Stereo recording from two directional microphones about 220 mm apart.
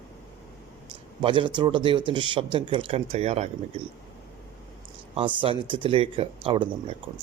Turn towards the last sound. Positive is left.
turn(degrees=-25)  # may be behind; listen again after turning